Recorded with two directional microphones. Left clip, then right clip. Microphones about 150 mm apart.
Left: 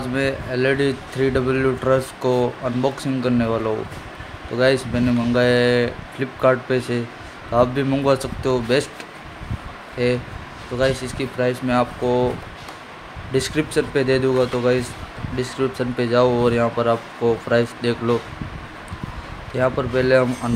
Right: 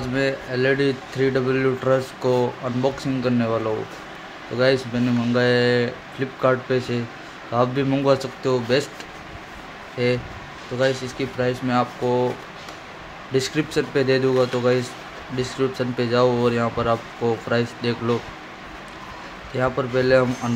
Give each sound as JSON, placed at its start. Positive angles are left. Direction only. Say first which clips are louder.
{"t": 0.1, "sound": "speech", "louder": "even", "side_deg": 20}
{"t": 10.0, "sound": "speech", "louder": "left 1 dB", "side_deg": 15}
{"t": 13.3, "sound": "speech", "louder": "left 1 dB", "side_deg": 15}
{"t": 19.5, "sound": "speech", "louder": "left 2 dB", "side_deg": 15}